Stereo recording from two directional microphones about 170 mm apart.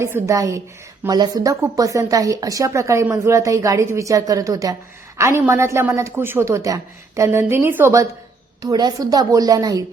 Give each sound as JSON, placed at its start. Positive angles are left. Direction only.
{"t": 0.0, "sound": "a woman's voice", "side_deg": -15}